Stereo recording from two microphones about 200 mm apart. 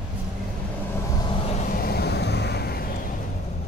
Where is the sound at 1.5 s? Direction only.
40° left (ahead or behind).